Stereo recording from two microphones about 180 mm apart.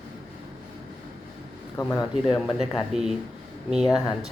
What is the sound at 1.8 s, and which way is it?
Speech, 20° left (ahead or behind).